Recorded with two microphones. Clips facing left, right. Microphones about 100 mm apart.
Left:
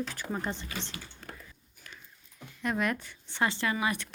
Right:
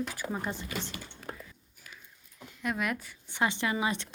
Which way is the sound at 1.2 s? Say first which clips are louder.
Right 7 dB; 5° right (ahead or behind).